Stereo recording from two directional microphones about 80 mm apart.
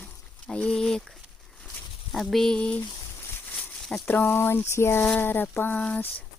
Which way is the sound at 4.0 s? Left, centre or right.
Left.